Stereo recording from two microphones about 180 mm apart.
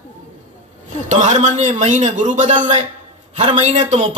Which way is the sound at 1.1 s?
40° right (ahead or behind).